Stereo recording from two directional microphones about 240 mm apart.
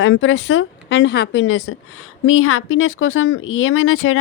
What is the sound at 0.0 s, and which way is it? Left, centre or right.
A woman's voice, left.